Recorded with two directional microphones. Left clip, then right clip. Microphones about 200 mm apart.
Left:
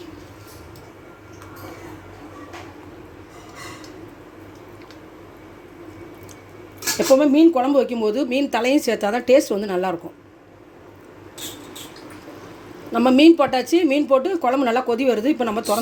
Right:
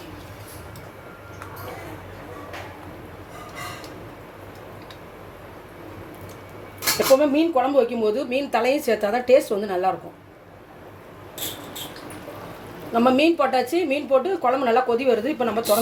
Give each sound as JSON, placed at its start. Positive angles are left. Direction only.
{"t": 7.1, "sound": "a woman's voice", "side_deg": 55}
{"t": 12.9, "sound": "a woman's voice", "side_deg": 45}